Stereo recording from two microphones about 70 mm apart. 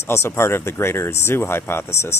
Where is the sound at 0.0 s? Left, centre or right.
Left.